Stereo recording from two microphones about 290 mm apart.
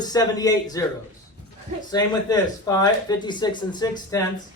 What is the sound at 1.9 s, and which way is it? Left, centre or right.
Speech, centre.